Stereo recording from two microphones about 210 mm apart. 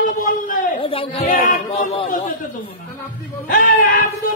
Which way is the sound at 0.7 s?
25° left (ahead or behind).